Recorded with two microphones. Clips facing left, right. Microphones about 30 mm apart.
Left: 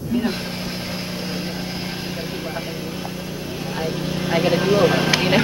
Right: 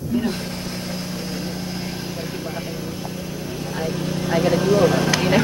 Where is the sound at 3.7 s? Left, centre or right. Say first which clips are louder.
Even; centre.